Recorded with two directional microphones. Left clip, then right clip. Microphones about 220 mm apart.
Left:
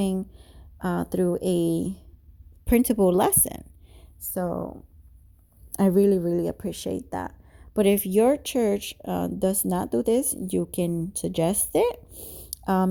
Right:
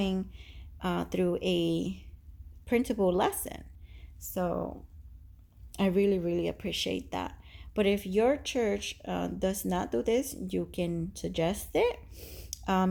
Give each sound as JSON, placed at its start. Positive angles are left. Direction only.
{"t": 0.0, "sound": "speech", "side_deg": 40}
{"t": 2.6, "sound": "a woman's voice", "side_deg": 50}
{"t": 5.7, "sound": "speech", "side_deg": 40}
{"t": 7.8, "sound": "speech", "side_deg": 50}